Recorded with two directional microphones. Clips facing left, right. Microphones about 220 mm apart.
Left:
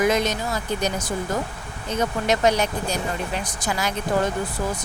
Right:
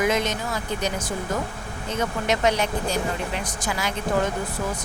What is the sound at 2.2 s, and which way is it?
Speech, 40° left (ahead or behind).